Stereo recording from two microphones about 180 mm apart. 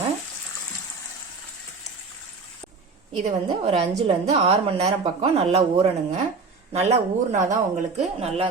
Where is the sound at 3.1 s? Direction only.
35° right (ahead or behind).